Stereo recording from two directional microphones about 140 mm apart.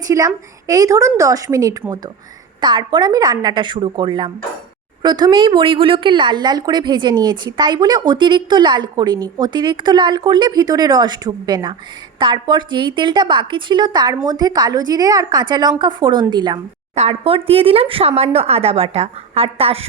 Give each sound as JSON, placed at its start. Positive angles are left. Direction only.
{"t": 0.1, "sound": "a woman's voice", "side_deg": -25}
{"t": 16.9, "sound": "speech", "side_deg": -50}